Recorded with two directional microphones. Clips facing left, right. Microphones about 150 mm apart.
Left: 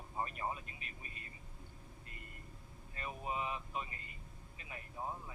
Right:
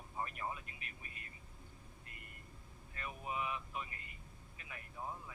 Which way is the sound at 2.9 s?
30° left (ahead or behind).